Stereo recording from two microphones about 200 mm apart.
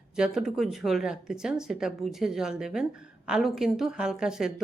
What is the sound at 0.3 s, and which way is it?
A woman's voice, centre (ahead or behind).